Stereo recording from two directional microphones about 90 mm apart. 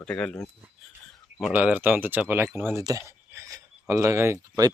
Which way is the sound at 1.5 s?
20° right (ahead or behind).